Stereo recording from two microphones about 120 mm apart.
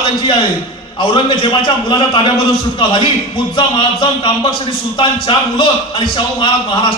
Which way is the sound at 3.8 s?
45° left (ahead or behind).